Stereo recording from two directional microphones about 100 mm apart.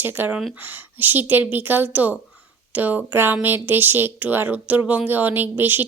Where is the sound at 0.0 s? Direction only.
20° right (ahead or behind).